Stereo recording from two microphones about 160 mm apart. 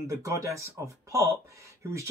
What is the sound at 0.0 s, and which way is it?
Speech, 20° right (ahead or behind).